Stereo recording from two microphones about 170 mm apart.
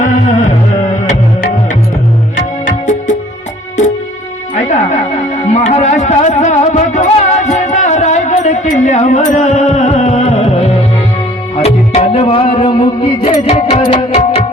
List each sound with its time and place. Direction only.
0.0 s music: 50° left (ahead or behind)
4.7 s music: 45° left (ahead or behind)